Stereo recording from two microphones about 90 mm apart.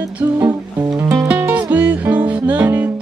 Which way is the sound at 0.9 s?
35° right (ahead or behind).